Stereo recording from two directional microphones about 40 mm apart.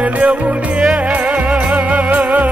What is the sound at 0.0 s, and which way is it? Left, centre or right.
Music, right.